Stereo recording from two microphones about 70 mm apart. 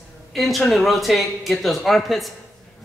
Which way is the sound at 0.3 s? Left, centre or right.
Centre.